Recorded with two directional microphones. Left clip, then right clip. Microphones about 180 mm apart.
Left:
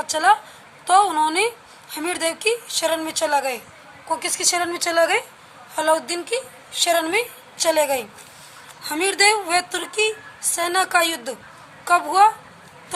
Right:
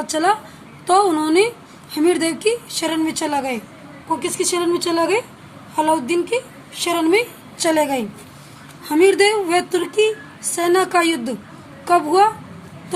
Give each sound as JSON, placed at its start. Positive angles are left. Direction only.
{"t": 0.0, "sound": "a woman's voice", "side_deg": 5}
{"t": 4.6, "sound": "a woman's voice", "side_deg": 25}